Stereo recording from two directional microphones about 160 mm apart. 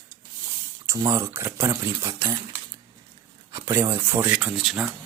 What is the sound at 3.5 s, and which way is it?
Speech, 20° right (ahead or behind).